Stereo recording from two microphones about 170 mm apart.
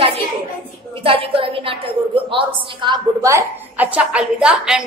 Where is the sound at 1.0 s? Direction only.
30° right (ahead or behind).